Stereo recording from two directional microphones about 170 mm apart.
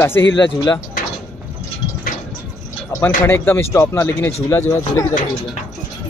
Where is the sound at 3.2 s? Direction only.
15° left (ahead or behind).